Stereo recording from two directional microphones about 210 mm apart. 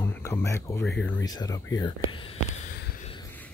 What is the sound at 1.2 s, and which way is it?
Speech, 20° left (ahead or behind).